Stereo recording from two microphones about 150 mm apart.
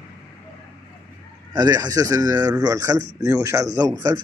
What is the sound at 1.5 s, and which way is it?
Speech, 25° right (ahead or behind).